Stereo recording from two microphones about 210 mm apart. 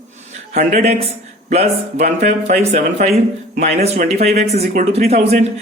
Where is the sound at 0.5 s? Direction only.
30° right (ahead or behind).